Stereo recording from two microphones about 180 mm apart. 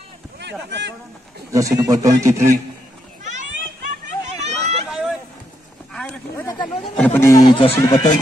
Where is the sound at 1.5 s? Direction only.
15° right (ahead or behind).